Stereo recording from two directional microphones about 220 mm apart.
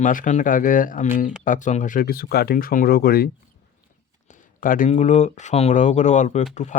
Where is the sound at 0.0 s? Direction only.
35° left (ahead or behind).